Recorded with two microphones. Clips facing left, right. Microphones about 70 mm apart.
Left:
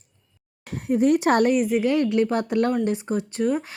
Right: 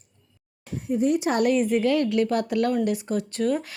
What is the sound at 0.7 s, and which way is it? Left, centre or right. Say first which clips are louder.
Speech: left 3 dB; left.